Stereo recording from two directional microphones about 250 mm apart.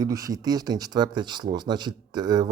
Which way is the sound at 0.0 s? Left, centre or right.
Centre.